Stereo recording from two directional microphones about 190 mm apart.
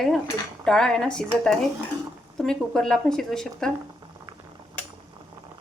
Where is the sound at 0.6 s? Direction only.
5° left (ahead or behind).